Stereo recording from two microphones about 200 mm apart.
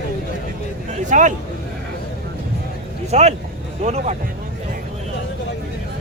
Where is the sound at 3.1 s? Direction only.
35° right (ahead or behind).